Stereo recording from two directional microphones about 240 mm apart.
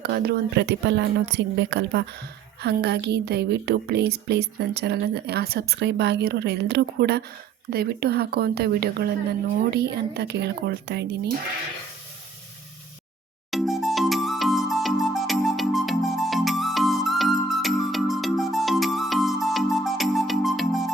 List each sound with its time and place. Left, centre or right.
0.0 s a woman's voice: right
13.5 s music: centre